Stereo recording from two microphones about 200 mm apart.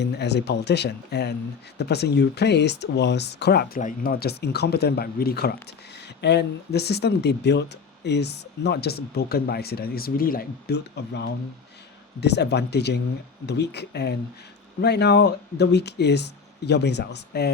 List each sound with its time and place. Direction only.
0.0 s speech: 55° left (ahead or behind)
3.8 s speech: 45° left (ahead or behind)